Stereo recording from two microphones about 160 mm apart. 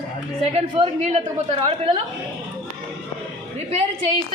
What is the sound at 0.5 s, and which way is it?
A man's voice, 40° right (ahead or behind).